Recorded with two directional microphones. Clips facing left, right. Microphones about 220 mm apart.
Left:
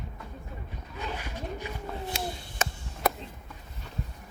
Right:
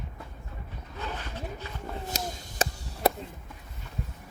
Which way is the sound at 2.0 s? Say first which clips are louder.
Left 1 dB; 40° right (ahead or behind).